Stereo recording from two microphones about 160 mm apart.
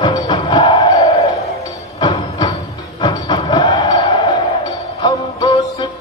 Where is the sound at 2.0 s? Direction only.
35° left (ahead or behind).